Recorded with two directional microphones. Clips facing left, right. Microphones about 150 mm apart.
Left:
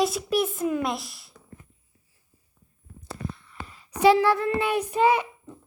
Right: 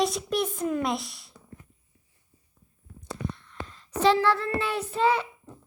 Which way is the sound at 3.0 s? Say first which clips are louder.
Right 1 dB; 5° left (ahead or behind).